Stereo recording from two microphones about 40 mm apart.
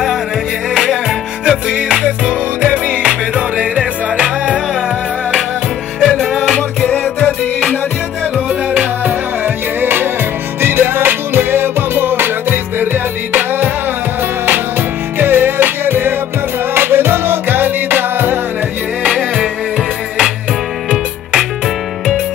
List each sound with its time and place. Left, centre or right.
1.4 s music: centre
2.7 s music: right
5.9 s music: centre
6.3 s music: centre
6.9 s music: left
9.8 s music: right
10.6 s music: right
15.1 s music: right